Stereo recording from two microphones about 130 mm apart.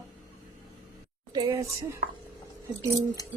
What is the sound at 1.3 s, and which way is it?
Speech, 35° right (ahead or behind).